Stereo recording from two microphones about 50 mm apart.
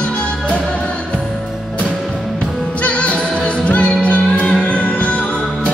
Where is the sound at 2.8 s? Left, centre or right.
Left.